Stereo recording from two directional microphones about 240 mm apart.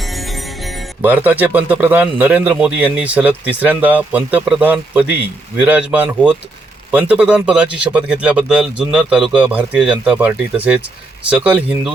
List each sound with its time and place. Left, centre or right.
0.0 s speech: centre